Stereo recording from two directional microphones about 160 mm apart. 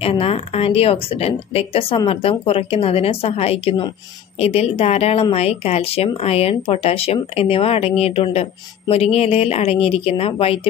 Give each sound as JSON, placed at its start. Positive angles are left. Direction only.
{"t": 0.0, "sound": "speech", "side_deg": 35}